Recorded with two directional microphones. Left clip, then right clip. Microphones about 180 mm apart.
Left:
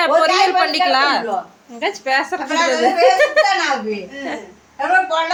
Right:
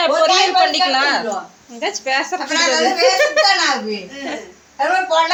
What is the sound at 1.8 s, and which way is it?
Speech, 15° left (ahead or behind).